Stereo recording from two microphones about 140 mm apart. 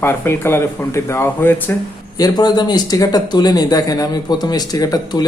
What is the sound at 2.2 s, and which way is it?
Speech, 30° left (ahead or behind).